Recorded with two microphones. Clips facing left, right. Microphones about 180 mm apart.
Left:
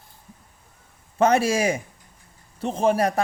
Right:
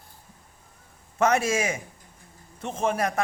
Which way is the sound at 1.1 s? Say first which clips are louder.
Left 3 dB; 30° left (ahead or behind).